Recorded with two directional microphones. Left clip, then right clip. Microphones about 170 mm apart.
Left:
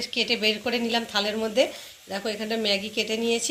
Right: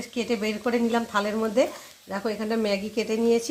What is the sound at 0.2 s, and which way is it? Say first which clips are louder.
Speech: left 3 dB; 65° right (ahead or behind).